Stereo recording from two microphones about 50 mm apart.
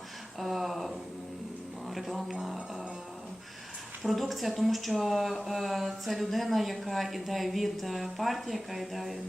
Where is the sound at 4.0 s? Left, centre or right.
Centre.